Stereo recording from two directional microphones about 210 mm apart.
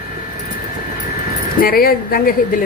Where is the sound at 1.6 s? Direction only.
45° left (ahead or behind).